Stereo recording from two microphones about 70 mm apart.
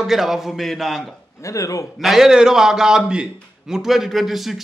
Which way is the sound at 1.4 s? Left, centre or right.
Left.